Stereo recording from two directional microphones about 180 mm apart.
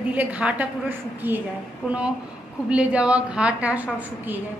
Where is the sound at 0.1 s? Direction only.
10° right (ahead or behind).